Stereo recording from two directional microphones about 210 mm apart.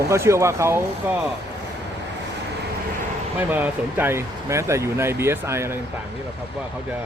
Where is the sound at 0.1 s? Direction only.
15° right (ahead or behind).